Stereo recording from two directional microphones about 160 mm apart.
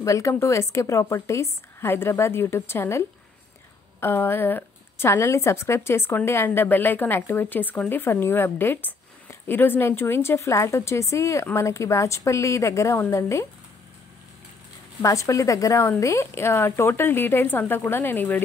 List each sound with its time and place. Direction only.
0.0 s a woman's voice: 20° left (ahead or behind)
15.0 s a woman's voice: 20° left (ahead or behind)